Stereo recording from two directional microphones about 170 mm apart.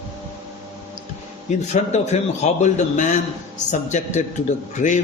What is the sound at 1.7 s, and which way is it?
A man's voice, 40° left (ahead or behind).